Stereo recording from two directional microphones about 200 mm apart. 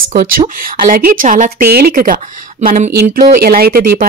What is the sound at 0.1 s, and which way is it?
Speech, 40° right (ahead or behind).